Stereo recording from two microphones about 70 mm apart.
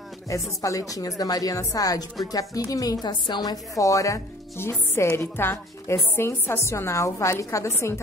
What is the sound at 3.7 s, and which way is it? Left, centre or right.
Speech, left.